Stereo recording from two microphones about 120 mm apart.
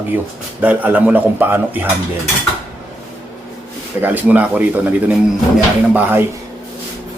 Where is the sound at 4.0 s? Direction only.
15° right (ahead or behind).